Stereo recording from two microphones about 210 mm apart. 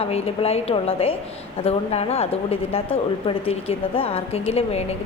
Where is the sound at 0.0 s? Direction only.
30° left (ahead or behind).